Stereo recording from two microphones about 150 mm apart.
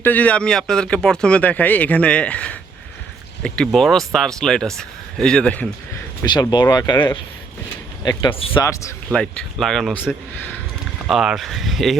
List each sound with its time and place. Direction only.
0.0 s speech: 10° left (ahead or behind)
6.2 s speech: 30° left (ahead or behind)
9.1 s speech: 5° left (ahead or behind)